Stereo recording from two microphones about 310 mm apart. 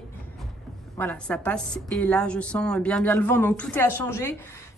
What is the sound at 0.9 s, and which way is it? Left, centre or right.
A woman's voice, centre.